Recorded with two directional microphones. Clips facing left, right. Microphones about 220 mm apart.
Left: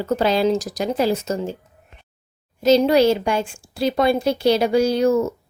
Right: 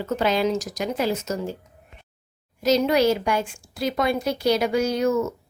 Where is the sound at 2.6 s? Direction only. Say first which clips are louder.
Left 4 dB; 30° left (ahead or behind).